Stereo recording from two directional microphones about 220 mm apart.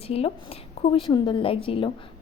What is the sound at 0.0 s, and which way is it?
A woman's voice, 25° left (ahead or behind).